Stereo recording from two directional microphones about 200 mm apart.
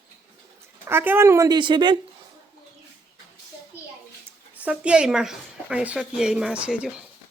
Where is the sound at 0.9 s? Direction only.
10° right (ahead or behind).